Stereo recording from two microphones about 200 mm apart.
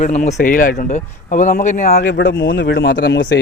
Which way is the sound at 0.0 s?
40° left (ahead or behind).